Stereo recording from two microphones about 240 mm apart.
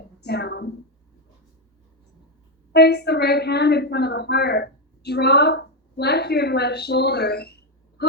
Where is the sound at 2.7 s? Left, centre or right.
Left.